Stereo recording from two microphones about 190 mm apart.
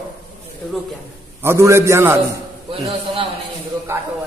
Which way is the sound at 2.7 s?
30° right (ahead or behind).